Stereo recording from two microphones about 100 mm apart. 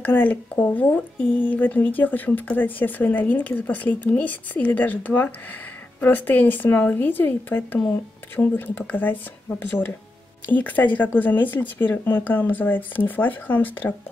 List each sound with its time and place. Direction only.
0.0 s speech: 20° left (ahead or behind)
10.5 s speech: 15° left (ahead or behind)